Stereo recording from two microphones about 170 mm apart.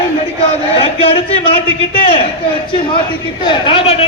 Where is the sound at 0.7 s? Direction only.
35° left (ahead or behind).